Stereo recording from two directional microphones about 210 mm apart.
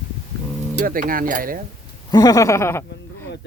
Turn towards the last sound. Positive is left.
turn(degrees=10)  # may be behind; listen again after turning